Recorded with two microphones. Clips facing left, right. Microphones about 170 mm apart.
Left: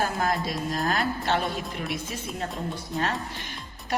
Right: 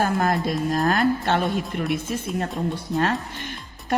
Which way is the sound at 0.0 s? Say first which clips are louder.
Right 5 dB; 55° right (ahead or behind).